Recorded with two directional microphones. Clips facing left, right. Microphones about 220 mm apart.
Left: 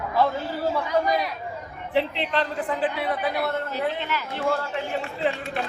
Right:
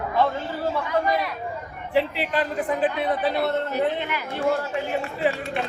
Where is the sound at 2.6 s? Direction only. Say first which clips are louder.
Right 3 dB; 20° right (ahead or behind).